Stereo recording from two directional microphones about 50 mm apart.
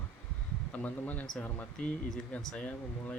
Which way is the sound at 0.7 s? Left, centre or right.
Left.